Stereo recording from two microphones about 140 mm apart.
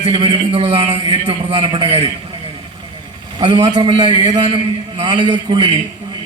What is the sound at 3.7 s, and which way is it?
A man's voice, 40° right (ahead or behind).